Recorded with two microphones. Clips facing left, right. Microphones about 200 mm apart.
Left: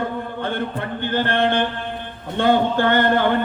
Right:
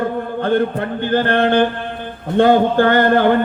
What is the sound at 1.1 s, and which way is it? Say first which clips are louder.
Speech: right 5 dB; 45° right (ahead or behind).